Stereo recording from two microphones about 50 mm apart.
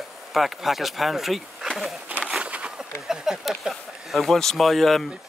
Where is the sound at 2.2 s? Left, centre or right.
Centre.